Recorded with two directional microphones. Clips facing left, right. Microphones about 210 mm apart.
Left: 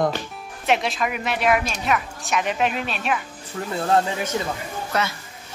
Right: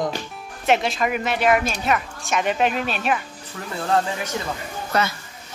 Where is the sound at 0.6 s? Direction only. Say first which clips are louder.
Right 2 dB; centre (ahead or behind).